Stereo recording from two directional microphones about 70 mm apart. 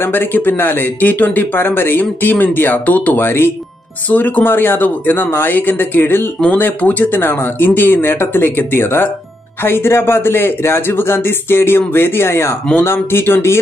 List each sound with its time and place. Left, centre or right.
0.0 s a man's voice: left